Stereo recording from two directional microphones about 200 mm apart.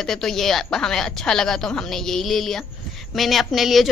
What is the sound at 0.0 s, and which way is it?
A woman's voice, centre (ahead or behind).